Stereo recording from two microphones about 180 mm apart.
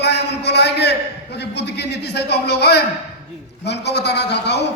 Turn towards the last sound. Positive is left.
turn(degrees=70)  # may be behind; listen again after turning